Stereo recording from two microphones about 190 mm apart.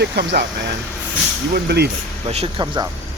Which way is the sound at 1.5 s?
60° right (ahead or behind).